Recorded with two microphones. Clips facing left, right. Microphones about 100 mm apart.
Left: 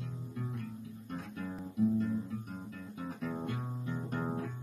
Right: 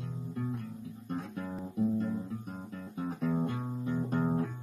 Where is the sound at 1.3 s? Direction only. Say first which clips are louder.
Right 3 dB; 30° right (ahead or behind).